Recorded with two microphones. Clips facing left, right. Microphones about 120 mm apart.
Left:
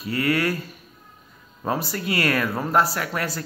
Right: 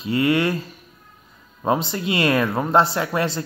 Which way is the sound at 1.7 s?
20° right (ahead or behind).